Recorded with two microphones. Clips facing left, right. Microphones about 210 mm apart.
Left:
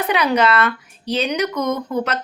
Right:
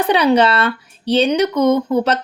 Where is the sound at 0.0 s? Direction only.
30° right (ahead or behind).